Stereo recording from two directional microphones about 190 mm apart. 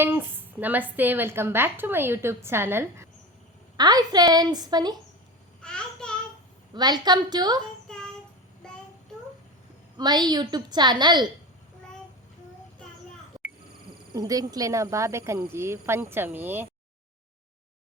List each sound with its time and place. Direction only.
0.0 s a woman's voice: 10° right (ahead or behind)
5.6 s child singing: 5° left (ahead or behind)
6.7 s a woman's voice: 20° right (ahead or behind)
7.9 s child singing: 5° left (ahead or behind)
10.0 s a woman's voice: 20° right (ahead or behind)
14.1 s a woman's voice: 20° right (ahead or behind)